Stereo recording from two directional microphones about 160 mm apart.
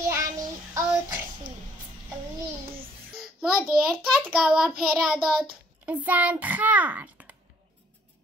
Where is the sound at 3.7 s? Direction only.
70° right (ahead or behind).